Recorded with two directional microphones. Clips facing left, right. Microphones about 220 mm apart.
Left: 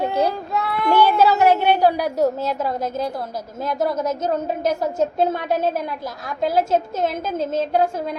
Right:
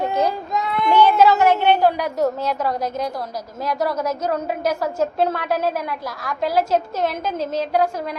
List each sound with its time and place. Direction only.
0.0 s child singing: 10° left (ahead or behind)
1.0 s a sound: 35° left (ahead or behind)
1.8 s a woman's voice: 10° left (ahead or behind)
2.2 s a woman's voice: 25° left (ahead or behind)